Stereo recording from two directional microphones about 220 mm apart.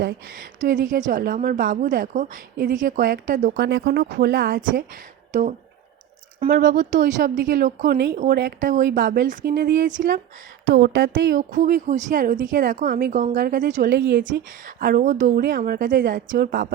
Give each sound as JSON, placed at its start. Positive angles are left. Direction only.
{"t": 0.0, "sound": "a woman's voice", "side_deg": -40}